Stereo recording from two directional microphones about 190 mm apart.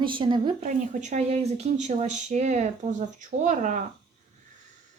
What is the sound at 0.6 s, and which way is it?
Speech, 40° right (ahead or behind).